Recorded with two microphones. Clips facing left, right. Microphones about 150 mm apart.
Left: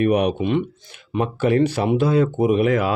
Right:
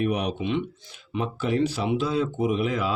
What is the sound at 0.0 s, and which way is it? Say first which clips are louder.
Speech: left 7 dB; 60° left (ahead or behind).